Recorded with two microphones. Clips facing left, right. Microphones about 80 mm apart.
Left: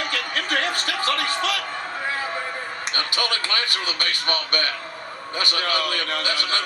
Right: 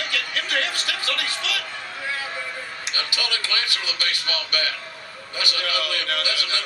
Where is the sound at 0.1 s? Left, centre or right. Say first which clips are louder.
Left 2 dB; left.